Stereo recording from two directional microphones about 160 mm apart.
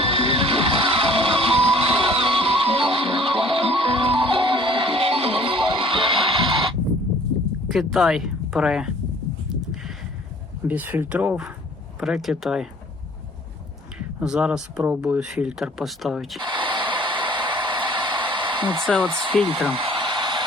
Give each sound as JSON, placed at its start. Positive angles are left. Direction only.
{"t": 0.0, "sound": "music", "side_deg": -35}
{"t": 7.7, "sound": "speech", "side_deg": 0}
{"t": 9.5, "sound": "a sound", "side_deg": 0}
{"t": 10.7, "sound": "speech", "side_deg": -10}
{"t": 14.2, "sound": "speech", "side_deg": -5}
{"t": 16.4, "sound": "a sound", "side_deg": -30}
{"t": 19.0, "sound": "speech", "side_deg": -30}
{"t": 19.8, "sound": "hair dryer", "side_deg": -30}